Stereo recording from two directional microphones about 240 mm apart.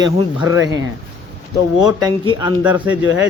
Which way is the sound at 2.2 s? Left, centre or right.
Centre.